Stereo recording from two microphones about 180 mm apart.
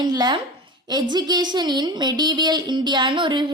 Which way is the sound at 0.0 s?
25° right (ahead or behind).